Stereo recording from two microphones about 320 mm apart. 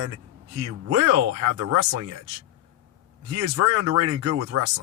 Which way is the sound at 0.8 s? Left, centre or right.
Right.